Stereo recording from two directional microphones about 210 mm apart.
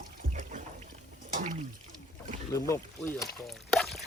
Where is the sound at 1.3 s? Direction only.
35° right (ahead or behind).